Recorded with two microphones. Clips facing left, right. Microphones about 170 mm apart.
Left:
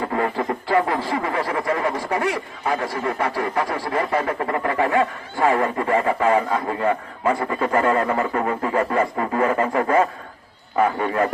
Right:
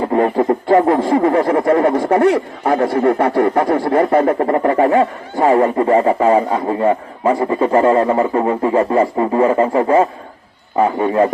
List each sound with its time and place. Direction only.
0.0 s speech: 35° right (ahead or behind)
4.3 s speech: 35° right (ahead or behind)
10.9 s a man's voice: 15° right (ahead or behind)